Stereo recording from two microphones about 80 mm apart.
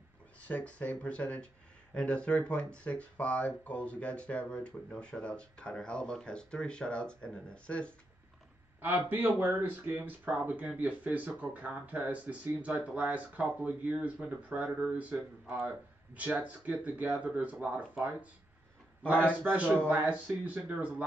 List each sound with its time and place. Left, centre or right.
0.4 s speech: centre
8.8 s speech: right